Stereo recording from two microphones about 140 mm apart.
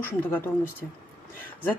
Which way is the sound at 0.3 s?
15° left (ahead or behind).